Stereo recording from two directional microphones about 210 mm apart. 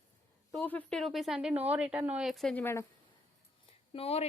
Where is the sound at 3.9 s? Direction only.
30° left (ahead or behind).